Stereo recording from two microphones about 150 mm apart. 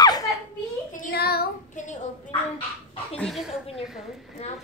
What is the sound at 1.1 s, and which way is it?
Child singing, 90° left.